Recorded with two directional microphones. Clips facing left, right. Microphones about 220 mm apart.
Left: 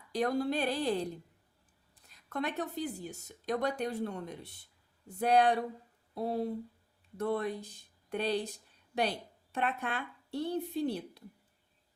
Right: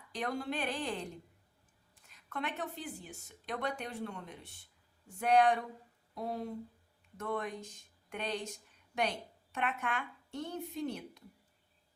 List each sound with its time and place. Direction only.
0.1 s speech: 40° left (ahead or behind)